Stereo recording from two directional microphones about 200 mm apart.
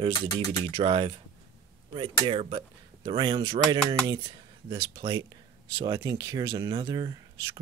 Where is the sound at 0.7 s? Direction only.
25° right (ahead or behind).